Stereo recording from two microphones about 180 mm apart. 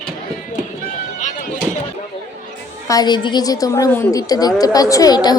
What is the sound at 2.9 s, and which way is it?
A woman's voice, 25° left (ahead or behind).